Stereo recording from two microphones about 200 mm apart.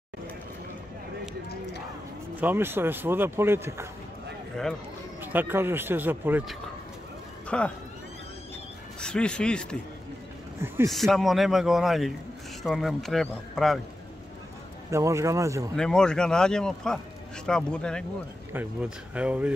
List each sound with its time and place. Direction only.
2.4 s speech: 10° right (ahead or behind)
5.2 s speech: 10° right (ahead or behind)
7.4 s speech: 5° left (ahead or behind)
9.0 s speech: 5° left (ahead or behind)
10.9 s speech: centre (ahead or behind)
14.9 s speech: 15° right (ahead or behind)
15.7 s speech: 5° left (ahead or behind)
18.5 s speech: 10° right (ahead or behind)